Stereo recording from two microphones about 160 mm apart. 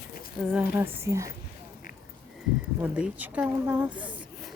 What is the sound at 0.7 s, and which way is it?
Speech, 15° right (ahead or behind).